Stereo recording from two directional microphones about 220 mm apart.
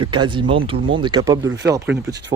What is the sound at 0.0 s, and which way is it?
Speech, 20° right (ahead or behind).